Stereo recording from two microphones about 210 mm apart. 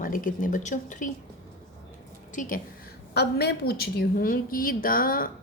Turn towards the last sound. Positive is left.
turn(degrees=40)  # may be behind; listen again after turning